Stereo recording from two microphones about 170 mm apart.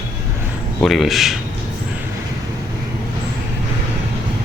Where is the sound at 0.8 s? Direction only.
Centre (ahead or behind).